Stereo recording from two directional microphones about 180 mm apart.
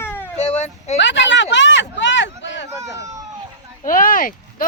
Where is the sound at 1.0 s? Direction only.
90° left.